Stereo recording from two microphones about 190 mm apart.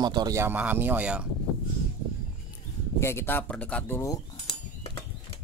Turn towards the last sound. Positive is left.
turn(degrees=10)  # may be behind; listen again after turning